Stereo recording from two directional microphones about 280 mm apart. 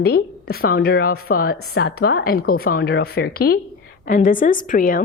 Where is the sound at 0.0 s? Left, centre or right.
Left.